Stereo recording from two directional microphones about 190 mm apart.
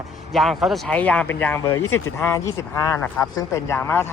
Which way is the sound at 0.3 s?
Centre (ahead or behind).